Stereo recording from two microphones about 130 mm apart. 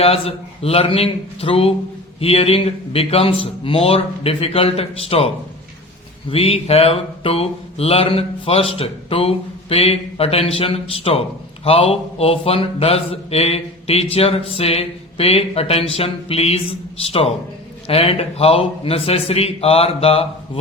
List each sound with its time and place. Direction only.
0.0 s speech: 50° left (ahead or behind)